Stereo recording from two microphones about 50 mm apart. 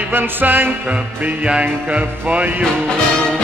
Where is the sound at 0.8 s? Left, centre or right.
Right.